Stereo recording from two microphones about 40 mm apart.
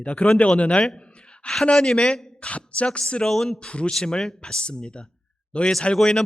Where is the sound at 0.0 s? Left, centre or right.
Left; by 2.2 s centre.